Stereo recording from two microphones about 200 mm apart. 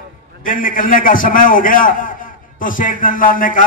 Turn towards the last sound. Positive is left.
turn(degrees=45)  # may be behind; listen again after turning